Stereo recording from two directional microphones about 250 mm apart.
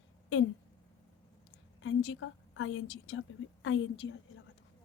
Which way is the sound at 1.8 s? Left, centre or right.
Left.